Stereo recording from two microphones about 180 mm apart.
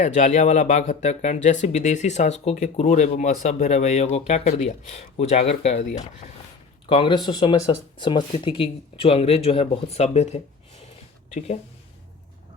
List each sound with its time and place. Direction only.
0.0 s speech: 40° left (ahead or behind)
6.8 s speech: 30° left (ahead or behind)